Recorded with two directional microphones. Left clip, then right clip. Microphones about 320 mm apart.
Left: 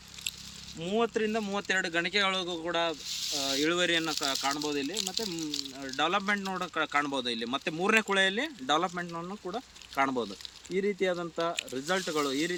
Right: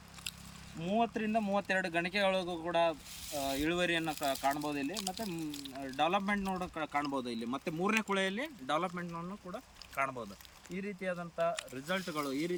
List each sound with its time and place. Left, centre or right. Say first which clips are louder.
0.8 s speech: left 4 dB; centre
10.7 s speech: left 10 dB; left
11.9 s speech: left 6 dB; centre